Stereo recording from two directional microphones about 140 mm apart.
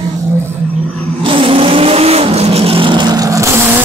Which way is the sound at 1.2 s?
40° right (ahead or behind).